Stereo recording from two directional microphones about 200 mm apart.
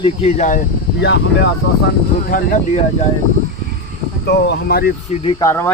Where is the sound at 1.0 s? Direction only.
60° left (ahead or behind).